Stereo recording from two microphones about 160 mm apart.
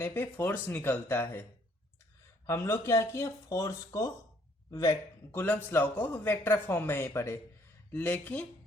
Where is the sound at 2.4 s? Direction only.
15° left (ahead or behind).